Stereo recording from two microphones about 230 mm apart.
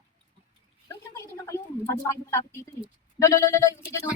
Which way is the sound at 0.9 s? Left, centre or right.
Centre.